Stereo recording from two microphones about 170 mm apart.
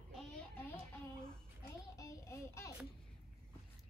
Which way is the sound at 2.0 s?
20° left (ahead or behind).